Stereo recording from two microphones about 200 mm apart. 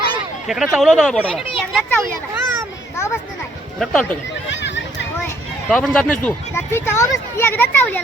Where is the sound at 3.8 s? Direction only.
Centre (ahead or behind).